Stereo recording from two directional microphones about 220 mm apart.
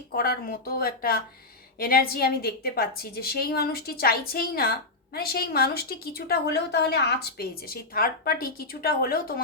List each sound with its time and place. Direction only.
0.1 s a woman's voice: 45° left (ahead or behind)